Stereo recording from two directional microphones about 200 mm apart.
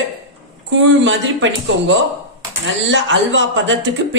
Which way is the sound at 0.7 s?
65° right (ahead or behind).